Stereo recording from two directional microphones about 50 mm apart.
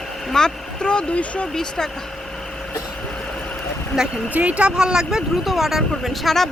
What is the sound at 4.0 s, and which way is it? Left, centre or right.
Speech, centre.